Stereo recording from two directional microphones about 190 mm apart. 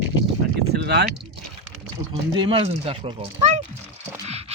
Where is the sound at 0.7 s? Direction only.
60° right (ahead or behind).